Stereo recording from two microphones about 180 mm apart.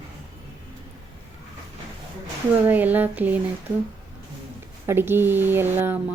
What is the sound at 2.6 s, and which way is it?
Speech, 10° right (ahead or behind).